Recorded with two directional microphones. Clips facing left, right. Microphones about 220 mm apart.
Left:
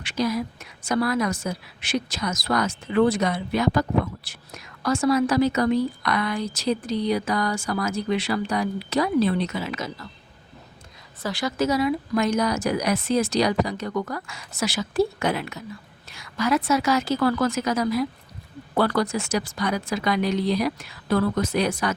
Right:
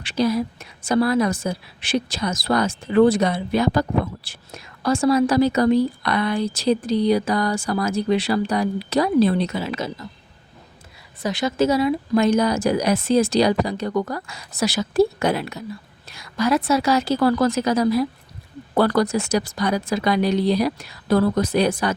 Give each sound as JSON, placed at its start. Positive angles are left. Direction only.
{"t": 0.0, "sound": "a woman's voice", "side_deg": -30}
{"t": 11.2, "sound": "a woman's voice", "side_deg": -20}